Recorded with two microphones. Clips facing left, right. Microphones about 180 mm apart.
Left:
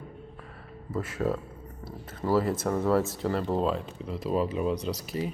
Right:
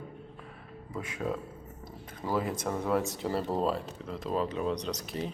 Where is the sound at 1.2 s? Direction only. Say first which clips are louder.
Left 4 dB; centre (ahead or behind).